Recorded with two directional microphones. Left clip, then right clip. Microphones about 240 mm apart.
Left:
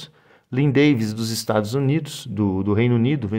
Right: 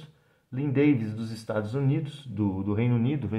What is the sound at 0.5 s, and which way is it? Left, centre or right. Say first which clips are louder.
Speech: left 7 dB; left.